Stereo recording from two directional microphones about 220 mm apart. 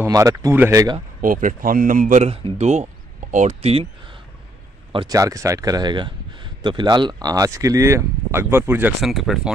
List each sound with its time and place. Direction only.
0.0 s speech: 15° right (ahead or behind)
1.2 s speech: 40° right (ahead or behind)
4.9 s speech: 15° right (ahead or behind)